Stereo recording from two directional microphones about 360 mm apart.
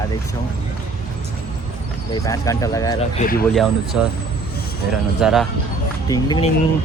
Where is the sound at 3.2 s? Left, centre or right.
Left.